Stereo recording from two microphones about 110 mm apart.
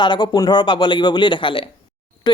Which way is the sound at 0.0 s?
40° left (ahead or behind).